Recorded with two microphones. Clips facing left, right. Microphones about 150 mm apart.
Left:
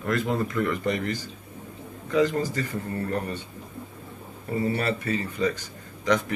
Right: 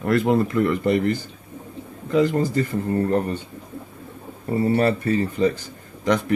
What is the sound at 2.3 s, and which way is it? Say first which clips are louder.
Speech: right 6 dB; 35° right (ahead or behind).